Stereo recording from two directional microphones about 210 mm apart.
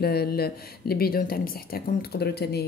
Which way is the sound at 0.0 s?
45° left (ahead or behind).